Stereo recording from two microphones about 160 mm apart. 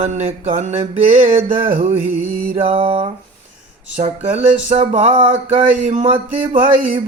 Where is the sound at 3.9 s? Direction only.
45° right (ahead or behind).